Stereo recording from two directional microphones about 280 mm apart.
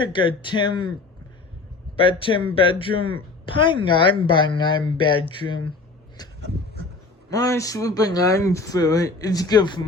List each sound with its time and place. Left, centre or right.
0.0 s speech: centre
2.0 s speech: centre
6.2 s a sound: centre
7.3 s speech: centre